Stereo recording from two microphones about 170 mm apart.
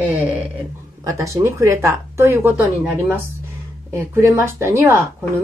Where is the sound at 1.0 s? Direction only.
20° right (ahead or behind).